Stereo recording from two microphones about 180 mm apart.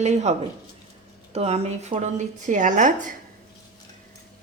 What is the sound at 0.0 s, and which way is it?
A woman's voice, 40° right (ahead or behind).